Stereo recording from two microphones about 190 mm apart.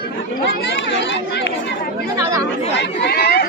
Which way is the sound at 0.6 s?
70° left (ahead or behind).